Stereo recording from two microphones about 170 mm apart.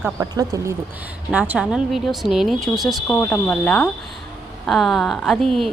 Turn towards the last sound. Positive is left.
turn(degrees=0)  # may be behind; listen again after turning